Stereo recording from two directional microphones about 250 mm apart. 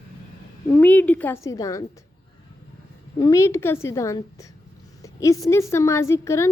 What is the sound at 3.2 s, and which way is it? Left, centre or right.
A woman's voice, centre.